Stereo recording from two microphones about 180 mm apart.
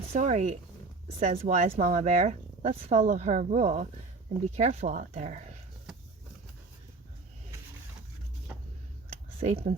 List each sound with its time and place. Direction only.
0.1 s speech: 40° right (ahead or behind)
9.4 s speech: 35° right (ahead or behind)